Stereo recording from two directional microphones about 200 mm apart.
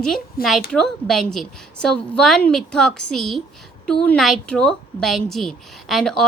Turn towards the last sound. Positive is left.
turn(degrees=0)  # may be behind; listen again after turning